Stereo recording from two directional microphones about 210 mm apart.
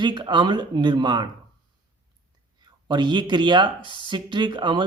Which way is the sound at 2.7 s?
20° right (ahead or behind).